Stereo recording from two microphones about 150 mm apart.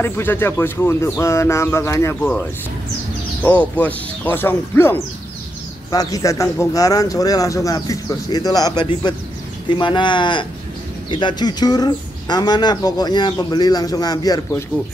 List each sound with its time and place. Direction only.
0.0 s speech: 15° left (ahead or behind)
3.4 s speech: 10° left (ahead or behind)
5.9 s speech: 25° left (ahead or behind)